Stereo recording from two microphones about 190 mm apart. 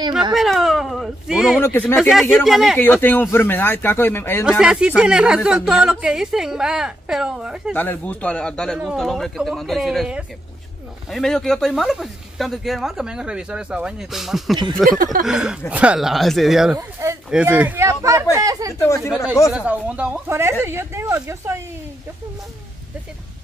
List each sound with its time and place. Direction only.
0.3 s speech: centre (ahead or behind)
1.6 s speech: 10° left (ahead or behind)
2.0 s speech: centre (ahead or behind)
2.8 s speech: 10° left (ahead or behind)
4.5 s speech: 5° right (ahead or behind)
7.7 s speech: 10° left (ahead or behind)
16.7 s speech: 15° right (ahead or behind)
18.9 s speech: centre (ahead or behind)